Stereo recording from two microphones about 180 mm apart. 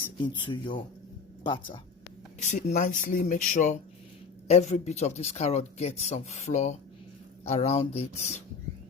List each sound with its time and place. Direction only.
0.2 s speech: 25° left (ahead or behind)
2.4 s speech: 40° left (ahead or behind)